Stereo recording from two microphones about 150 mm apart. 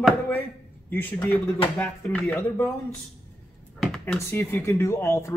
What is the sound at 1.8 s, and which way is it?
Speech, 10° left (ahead or behind).